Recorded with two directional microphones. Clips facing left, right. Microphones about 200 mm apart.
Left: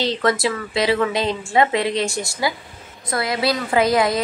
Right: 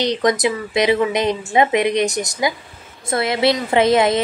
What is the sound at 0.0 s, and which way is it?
A woman's voice, 15° right (ahead or behind).